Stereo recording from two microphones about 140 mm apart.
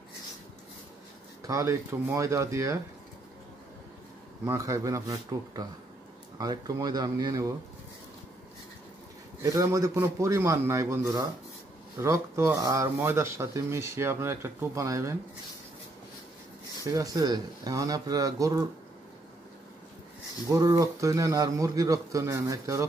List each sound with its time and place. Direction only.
1.5 s speech: 20° right (ahead or behind)
4.5 s speech: 20° right (ahead or behind)
9.4 s speech: 20° right (ahead or behind)
16.8 s speech: 25° right (ahead or behind)
20.4 s speech: 20° right (ahead or behind)